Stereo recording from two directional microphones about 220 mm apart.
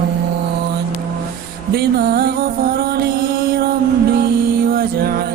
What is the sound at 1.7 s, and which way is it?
Music, 45° right (ahead or behind).